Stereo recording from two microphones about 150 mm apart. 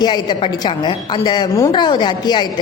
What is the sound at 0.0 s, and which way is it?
A woman's voice, 30° left (ahead or behind).